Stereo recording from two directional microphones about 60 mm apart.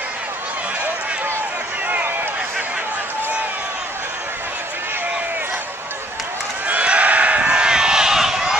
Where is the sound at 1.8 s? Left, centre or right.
Right.